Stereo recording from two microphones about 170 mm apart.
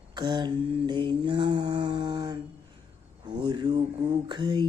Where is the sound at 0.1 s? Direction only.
25° right (ahead or behind).